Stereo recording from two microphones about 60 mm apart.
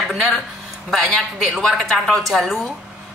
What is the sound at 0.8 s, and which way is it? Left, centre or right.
A woman's voice, centre.